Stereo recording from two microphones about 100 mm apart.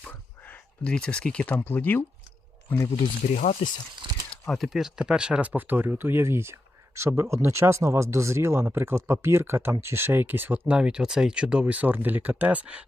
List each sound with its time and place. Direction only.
0.0 s speech: 15° left (ahead or behind)
3.6 s speech: 65° left (ahead or behind)
4.0 s a sound: 55° right (ahead or behind)
4.4 s speech: centre (ahead or behind); by 12.8 s 15° right (ahead or behind)